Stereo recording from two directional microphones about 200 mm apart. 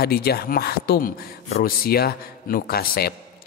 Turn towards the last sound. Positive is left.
turn(degrees=50)  # may be behind; listen again after turning